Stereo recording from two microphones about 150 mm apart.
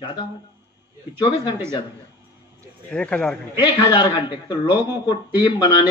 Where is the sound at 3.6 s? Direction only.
30° left (ahead or behind).